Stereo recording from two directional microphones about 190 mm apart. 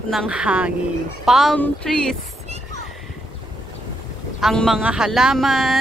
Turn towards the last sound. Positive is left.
turn(degrees=0)  # may be behind; listen again after turning